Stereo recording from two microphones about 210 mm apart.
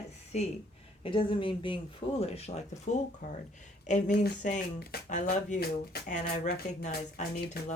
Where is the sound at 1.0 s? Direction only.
25° left (ahead or behind).